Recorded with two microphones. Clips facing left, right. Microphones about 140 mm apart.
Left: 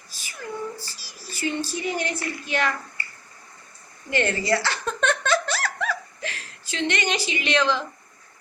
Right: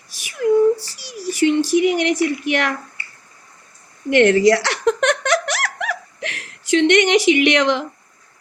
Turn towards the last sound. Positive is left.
turn(degrees=-70)  # may be behind; listen again after turning